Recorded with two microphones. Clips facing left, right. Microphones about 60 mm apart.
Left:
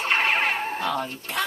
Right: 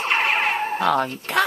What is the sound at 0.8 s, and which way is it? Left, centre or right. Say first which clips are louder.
Speech: right 7 dB; right.